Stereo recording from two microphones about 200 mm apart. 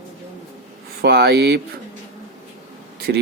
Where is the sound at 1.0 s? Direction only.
55° right (ahead or behind).